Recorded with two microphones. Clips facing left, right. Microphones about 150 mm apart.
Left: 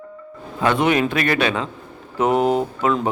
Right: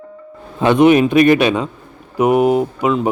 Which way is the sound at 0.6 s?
20° right (ahead or behind).